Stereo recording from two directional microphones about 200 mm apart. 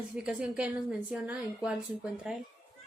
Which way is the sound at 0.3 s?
5° right (ahead or behind).